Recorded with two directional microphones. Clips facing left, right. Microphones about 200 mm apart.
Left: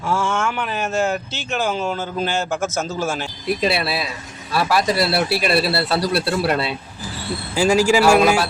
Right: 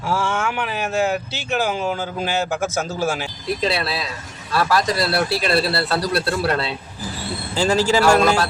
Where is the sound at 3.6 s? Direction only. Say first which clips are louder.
Left 1 dB; 10° left (ahead or behind).